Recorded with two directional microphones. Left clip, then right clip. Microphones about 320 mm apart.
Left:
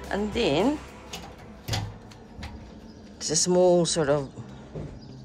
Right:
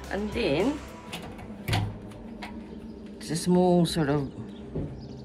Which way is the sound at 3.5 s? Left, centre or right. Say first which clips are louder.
Left 3 dB; centre.